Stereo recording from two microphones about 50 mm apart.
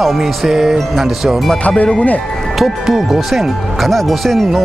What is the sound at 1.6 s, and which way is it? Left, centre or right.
Speech, left.